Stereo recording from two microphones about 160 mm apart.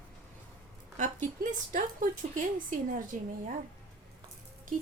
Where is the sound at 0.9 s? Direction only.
50° right (ahead or behind).